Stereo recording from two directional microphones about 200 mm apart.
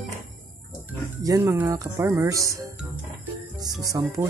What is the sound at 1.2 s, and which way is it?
Speech, 15° right (ahead or behind).